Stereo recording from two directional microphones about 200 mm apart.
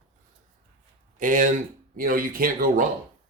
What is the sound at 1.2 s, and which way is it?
Speech, 40° right (ahead or behind).